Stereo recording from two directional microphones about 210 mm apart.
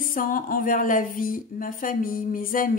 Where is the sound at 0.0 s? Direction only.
40° left (ahead or behind).